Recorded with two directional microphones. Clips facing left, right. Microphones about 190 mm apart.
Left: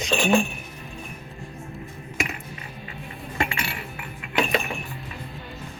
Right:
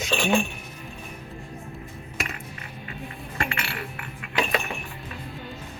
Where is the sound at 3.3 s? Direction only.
20° left (ahead or behind).